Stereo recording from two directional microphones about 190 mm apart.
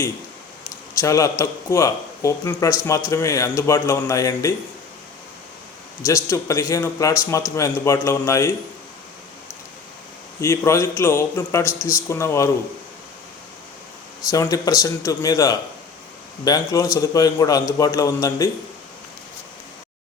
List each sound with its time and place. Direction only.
0.9 s a man's voice: 15° left (ahead or behind)
6.1 s a man's voice: 15° left (ahead or behind)
10.4 s a man's voice: 15° left (ahead or behind)
14.3 s a man's voice: 20° left (ahead or behind)